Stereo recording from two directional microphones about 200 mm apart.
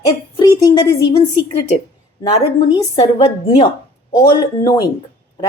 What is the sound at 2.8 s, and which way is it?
A woman's voice, 30° left (ahead or behind).